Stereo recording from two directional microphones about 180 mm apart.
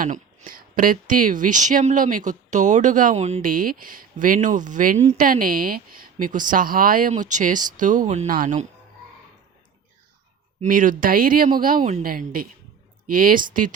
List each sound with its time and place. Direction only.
0.0 s speech: 45° right (ahead or behind)
10.6 s speech: 50° right (ahead or behind)
12.0 s speech: 55° right (ahead or behind)